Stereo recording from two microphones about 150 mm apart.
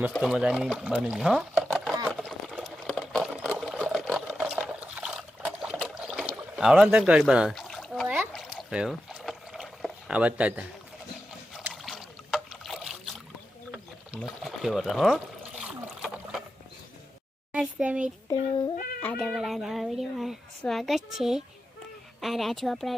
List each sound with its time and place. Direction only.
0.1 s speech: centre (ahead or behind)
2.2 s boiling: 5° right (ahead or behind)
3.4 s water: centre (ahead or behind)
5.8 s a sound: centre (ahead or behind)
8.0 s a sound: 10° right (ahead or behind)
8.3 s rowboat: centre (ahead or behind)
11.7 s trickle: centre (ahead or behind)
13.7 s pour: centre (ahead or behind)
17.5 s a sound: 5° right (ahead or behind)
18.3 s cat: 30° left (ahead or behind)
19.0 s a sound: 5° left (ahead or behind)
22.2 s speech: centre (ahead or behind)